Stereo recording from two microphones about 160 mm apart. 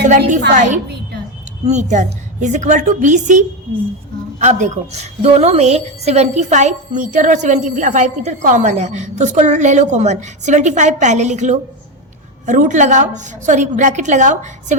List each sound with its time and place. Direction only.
0.5 s a woman's voice: 50° right (ahead or behind)